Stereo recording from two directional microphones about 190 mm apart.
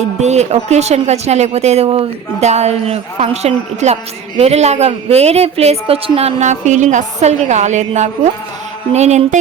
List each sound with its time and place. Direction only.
0.0 s a woman's voice: 35° right (ahead or behind)